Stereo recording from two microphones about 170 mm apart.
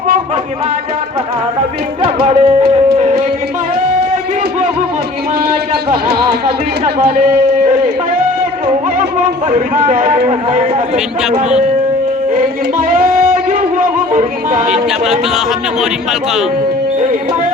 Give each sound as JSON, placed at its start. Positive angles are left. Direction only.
{"t": 2.2, "sound": "music", "side_deg": -40}
{"t": 8.6, "sound": "music", "side_deg": -45}
{"t": 10.2, "sound": "speech", "side_deg": -50}
{"t": 12.9, "sound": "music", "side_deg": -55}
{"t": 14.7, "sound": "speech", "side_deg": 0}